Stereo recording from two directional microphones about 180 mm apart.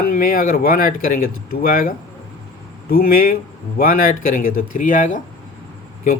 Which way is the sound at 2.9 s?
55° left (ahead or behind).